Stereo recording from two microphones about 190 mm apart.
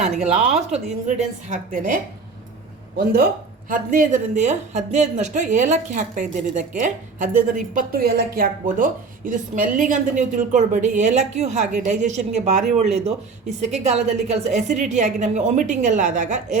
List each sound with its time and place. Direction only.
0.3 s a woman's voice: 35° right (ahead or behind)
3.7 s a woman's voice: 45° right (ahead or behind)